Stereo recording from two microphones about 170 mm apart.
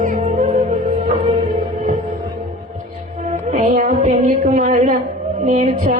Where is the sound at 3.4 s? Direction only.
40° right (ahead or behind).